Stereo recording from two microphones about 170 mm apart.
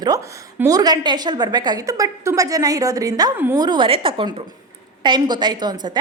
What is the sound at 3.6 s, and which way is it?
A woman's voice, 25° right (ahead or behind).